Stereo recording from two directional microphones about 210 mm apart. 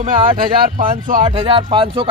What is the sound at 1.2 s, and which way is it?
Speech, 25° right (ahead or behind).